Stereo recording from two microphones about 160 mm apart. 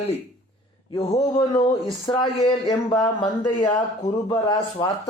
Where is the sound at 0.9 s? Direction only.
25° left (ahead or behind).